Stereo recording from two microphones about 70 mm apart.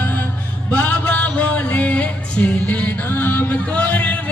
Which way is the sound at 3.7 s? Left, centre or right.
Centre.